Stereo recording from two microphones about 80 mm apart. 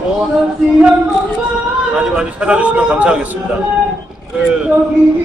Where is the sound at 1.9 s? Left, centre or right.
Centre.